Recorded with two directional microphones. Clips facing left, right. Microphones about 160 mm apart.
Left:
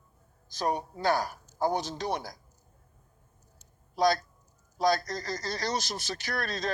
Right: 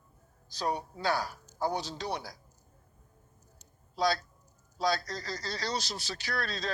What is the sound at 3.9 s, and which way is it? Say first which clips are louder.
A man's voice: left 4 dB; 45° left (ahead or behind).